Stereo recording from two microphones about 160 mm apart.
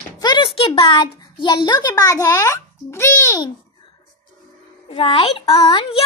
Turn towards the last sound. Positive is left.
turn(degrees=35)  # may be behind; listen again after turning